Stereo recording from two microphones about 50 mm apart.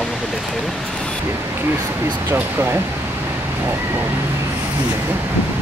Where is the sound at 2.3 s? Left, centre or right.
Right.